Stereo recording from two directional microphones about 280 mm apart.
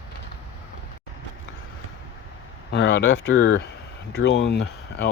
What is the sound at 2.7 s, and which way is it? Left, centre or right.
Speech, left.